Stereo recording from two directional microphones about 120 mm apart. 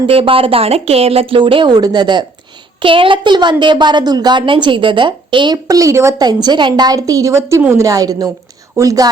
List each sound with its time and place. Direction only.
0.1 s a woman's voice: 50° right (ahead or behind)
5.6 s speech: 30° right (ahead or behind)
6.1 s a woman's voice: 35° right (ahead or behind)